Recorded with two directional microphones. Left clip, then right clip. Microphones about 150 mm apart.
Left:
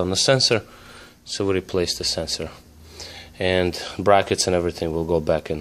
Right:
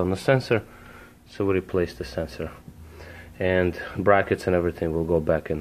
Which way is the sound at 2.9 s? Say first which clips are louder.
Left 3 dB; 40° left (ahead or behind).